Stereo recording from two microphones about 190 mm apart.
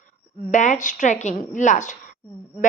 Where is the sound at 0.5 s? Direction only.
40° left (ahead or behind).